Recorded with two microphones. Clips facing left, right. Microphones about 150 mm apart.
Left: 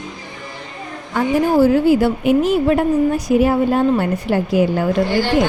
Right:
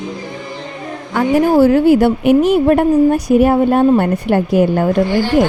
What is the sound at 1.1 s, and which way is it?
A woman's voice, 70° right (ahead or behind).